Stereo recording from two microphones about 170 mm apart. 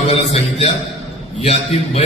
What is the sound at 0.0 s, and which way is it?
A man's voice, 35° left (ahead or behind).